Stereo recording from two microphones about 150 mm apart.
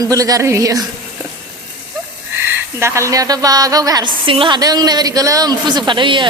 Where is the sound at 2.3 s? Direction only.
15° right (ahead or behind).